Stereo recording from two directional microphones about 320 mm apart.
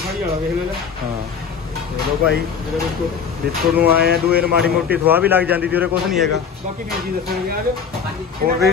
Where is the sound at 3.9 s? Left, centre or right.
Right.